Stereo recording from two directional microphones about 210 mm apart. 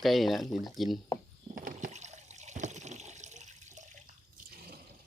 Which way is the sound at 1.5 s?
40° right (ahead or behind).